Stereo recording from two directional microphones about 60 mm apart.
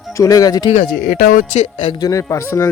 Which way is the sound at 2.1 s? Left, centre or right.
Left.